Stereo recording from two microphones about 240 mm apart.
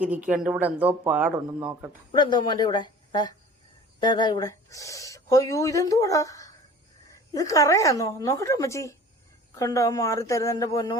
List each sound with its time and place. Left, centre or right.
0.0 s speech: centre
2.1 s speech: centre